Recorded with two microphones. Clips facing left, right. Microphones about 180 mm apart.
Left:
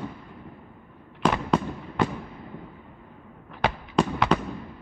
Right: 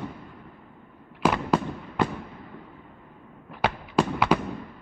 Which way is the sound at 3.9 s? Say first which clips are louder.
Even; 5° right (ahead or behind).